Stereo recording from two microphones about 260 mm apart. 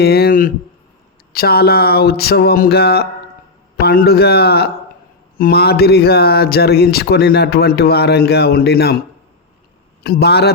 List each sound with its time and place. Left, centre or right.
0.0 s speech: left
10.0 s speech: left